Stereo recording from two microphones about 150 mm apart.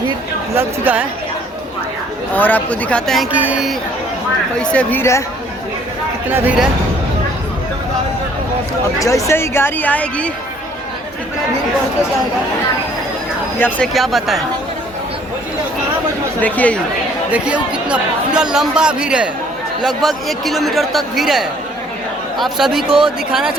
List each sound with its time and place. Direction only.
0.5 s speech: 10° right (ahead or behind)
2.3 s speech: 10° left (ahead or behind)
3.3 s speech: 10° right (ahead or behind)
4.5 s speech: 5° left (ahead or behind)
6.3 s speech: 10° right (ahead or behind)
9.0 s speech: 20° left (ahead or behind)
13.6 s speech: 10° left (ahead or behind)
16.4 s speech: 10° left (ahead or behind)
17.3 s speech: 10° right (ahead or behind)
22.5 s speech: centre (ahead or behind)
22.9 s speech: 35° right (ahead or behind)
23.3 s speech: 5° right (ahead or behind)